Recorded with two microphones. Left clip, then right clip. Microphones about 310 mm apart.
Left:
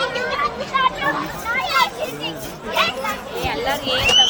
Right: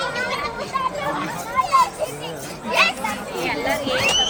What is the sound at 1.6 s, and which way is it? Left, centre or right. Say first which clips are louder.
Children playing: right 1 dB; right.